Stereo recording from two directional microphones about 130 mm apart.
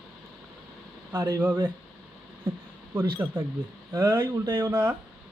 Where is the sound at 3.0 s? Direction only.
15° right (ahead or behind).